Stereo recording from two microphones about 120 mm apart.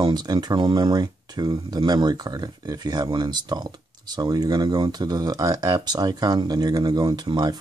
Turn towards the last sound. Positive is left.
turn(degrees=-35)  # may be behind; listen again after turning